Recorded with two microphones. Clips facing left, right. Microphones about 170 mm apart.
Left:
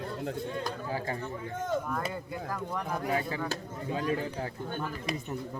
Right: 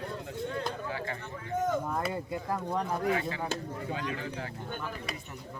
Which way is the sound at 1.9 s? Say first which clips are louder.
Right 2 dB; 25° right (ahead or behind).